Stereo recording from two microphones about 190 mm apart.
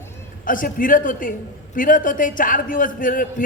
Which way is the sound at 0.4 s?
45° left (ahead or behind).